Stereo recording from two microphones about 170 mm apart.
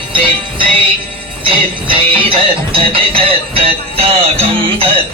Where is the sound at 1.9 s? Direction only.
30° right (ahead or behind).